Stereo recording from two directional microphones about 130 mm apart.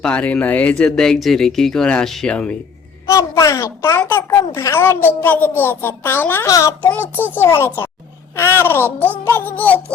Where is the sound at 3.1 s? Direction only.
25° left (ahead or behind).